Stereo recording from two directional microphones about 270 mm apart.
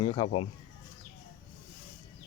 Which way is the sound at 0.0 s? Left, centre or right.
Centre.